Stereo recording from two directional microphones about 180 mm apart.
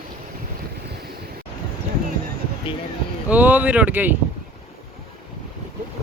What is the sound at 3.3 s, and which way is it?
Speech, 10° right (ahead or behind).